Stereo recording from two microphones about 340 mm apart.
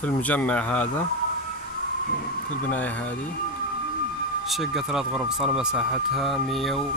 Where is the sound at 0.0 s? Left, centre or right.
Centre.